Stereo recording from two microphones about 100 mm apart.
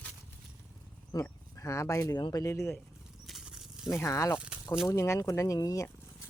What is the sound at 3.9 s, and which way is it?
Speech, 30° left (ahead or behind).